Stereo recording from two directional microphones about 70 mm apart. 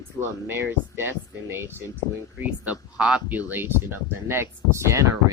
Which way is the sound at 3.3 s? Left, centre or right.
Right.